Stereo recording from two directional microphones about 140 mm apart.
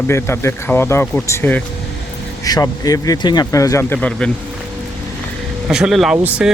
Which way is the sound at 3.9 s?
5° left (ahead or behind).